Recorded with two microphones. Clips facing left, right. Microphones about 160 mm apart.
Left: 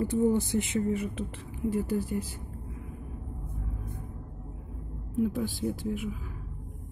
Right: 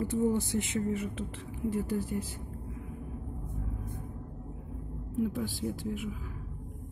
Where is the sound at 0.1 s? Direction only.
15° left (ahead or behind).